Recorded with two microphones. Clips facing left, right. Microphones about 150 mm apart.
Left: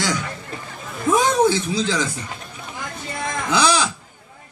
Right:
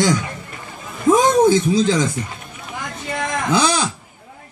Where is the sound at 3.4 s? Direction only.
50° right (ahead or behind).